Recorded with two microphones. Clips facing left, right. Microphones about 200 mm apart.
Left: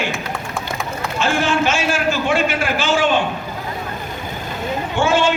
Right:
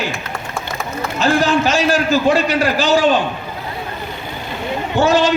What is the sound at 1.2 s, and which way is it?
A man's voice, 35° right (ahead or behind).